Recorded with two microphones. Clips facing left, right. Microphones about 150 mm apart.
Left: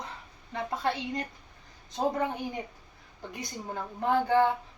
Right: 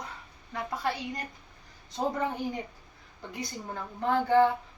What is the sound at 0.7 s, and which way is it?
A woman's voice, 25° left (ahead or behind).